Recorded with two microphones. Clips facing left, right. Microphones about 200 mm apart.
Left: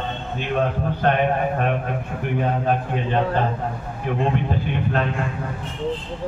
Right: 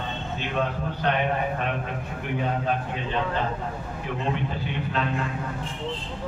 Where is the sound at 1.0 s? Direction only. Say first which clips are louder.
Left 5 dB; 50° left (ahead or behind).